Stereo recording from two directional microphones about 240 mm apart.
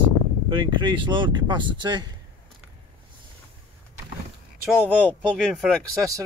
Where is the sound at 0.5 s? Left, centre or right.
Centre.